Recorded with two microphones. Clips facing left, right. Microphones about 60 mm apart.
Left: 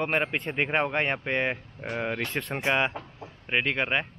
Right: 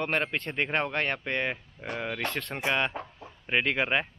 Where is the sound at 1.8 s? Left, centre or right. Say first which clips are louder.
Even; left.